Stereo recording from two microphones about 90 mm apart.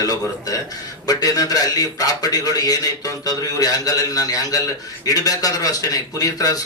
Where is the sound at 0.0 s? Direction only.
40° left (ahead or behind).